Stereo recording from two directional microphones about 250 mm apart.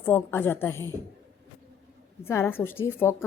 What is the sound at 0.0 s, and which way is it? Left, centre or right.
Speech, centre.